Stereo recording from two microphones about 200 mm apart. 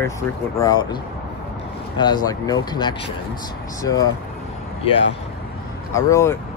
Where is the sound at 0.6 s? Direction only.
20° left (ahead or behind).